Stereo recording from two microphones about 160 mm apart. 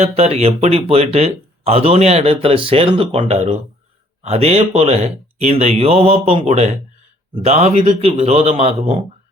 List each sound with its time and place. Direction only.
0.0 s speech: 40° right (ahead or behind)